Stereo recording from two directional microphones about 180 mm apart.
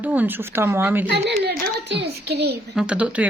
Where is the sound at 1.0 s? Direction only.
75° right (ahead or behind).